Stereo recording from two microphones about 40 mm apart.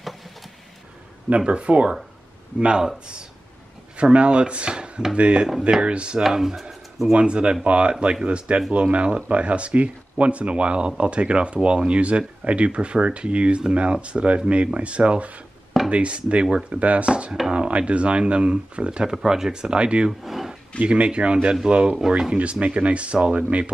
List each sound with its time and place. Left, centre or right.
1.4 s speech: right
3.9 s speech: right
6.2 s speech: centre
7.1 s speech: right
16.4 s speech: centre
16.8 s speech: right
20.1 s a sound: centre
20.8 s speech: right